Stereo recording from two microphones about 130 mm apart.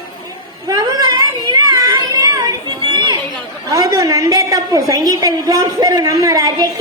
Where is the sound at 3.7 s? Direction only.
30° right (ahead or behind).